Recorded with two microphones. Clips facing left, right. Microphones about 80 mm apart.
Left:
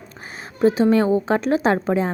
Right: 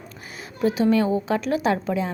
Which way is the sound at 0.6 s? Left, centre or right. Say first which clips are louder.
Left 4 dB; left.